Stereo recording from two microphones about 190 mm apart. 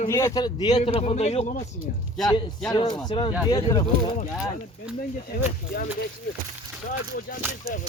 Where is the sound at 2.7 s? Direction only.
20° left (ahead or behind).